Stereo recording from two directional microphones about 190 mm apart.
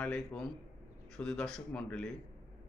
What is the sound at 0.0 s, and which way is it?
Speech, 5° left (ahead or behind).